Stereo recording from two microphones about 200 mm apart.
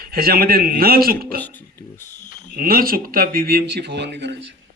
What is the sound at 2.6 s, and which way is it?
Speech, 45° right (ahead or behind).